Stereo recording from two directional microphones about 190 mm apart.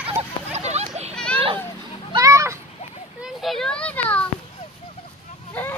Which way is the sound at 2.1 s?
15° right (ahead or behind).